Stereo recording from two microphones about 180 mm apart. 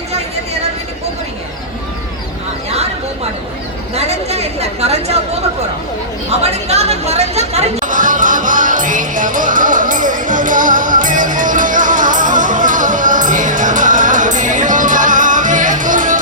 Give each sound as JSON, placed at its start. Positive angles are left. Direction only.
{"t": 3.9, "sound": "chatter", "side_deg": -35}
{"t": 6.3, "sound": "chatter", "side_deg": -35}